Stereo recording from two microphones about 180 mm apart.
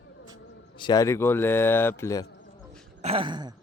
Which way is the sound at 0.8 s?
20° left (ahead or behind).